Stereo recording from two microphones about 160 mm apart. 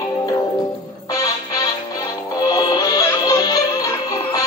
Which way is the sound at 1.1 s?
20° left (ahead or behind).